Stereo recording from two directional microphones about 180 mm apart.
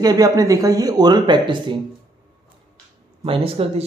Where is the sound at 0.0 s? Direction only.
20° right (ahead or behind).